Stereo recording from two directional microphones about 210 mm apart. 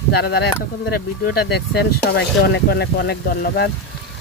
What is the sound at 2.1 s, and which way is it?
Speech, 55° left (ahead or behind).